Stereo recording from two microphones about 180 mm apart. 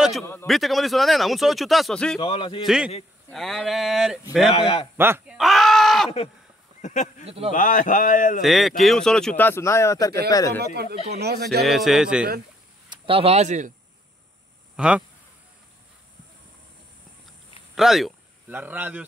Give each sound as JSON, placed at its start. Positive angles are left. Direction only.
{"t": 0.2, "sound": "a man's voice", "side_deg": 15}
{"t": 0.5, "sound": "speech", "side_deg": 0}
{"t": 2.1, "sound": "a man's voice", "side_deg": 30}
{"t": 2.6, "sound": "speech", "side_deg": -5}
{"t": 4.9, "sound": "a sound", "side_deg": -10}
{"t": 6.8, "sound": "speech", "side_deg": 45}
{"t": 7.2, "sound": "speech", "side_deg": -30}
{"t": 7.5, "sound": "speech", "side_deg": 45}
{"t": 8.4, "sound": "a man's voice", "side_deg": 0}
{"t": 10.6, "sound": "speech", "side_deg": -60}
{"t": 11.6, "sound": "speech", "side_deg": 0}
{"t": 12.9, "sound": "speech", "side_deg": -30}
{"t": 14.8, "sound": "speech", "side_deg": -5}
{"t": 17.7, "sound": "speech", "side_deg": 0}